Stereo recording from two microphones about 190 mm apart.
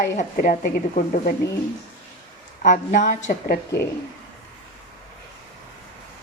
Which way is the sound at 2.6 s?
40° left (ahead or behind).